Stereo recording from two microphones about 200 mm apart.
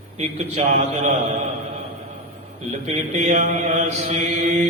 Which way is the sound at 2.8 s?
35° right (ahead or behind).